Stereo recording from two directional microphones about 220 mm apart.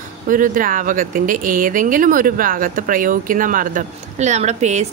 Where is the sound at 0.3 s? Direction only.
40° right (ahead or behind).